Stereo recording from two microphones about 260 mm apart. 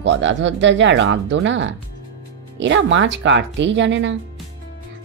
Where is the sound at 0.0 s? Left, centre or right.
Right.